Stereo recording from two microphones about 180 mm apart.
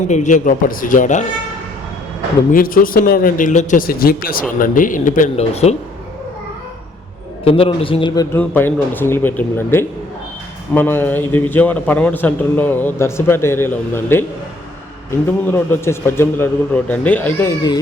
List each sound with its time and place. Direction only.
0.1 s speech: 40° left (ahead or behind)
2.5 s speech: 50° left (ahead or behind)
7.4 s a man's voice: 30° left (ahead or behind)
8.4 s a man's voice: 10° left (ahead or behind)
15.4 s a man's voice: 10° left (ahead or behind)